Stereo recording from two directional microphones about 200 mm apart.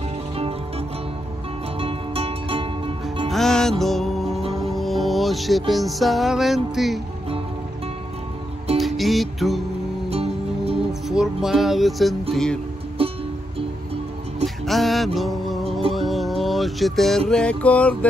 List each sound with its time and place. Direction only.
0.4 s music: 30° right (ahead or behind)
3.3 s music: centre (ahead or behind)
8.7 s music: centre (ahead or behind)
10.0 s music: 30° right (ahead or behind)
10.9 s music: centre (ahead or behind)
13.0 s music: 30° right (ahead or behind)
14.4 s music: centre (ahead or behind)
15.9 s speech: centre (ahead or behind)
17.3 s mantra: 5° left (ahead or behind)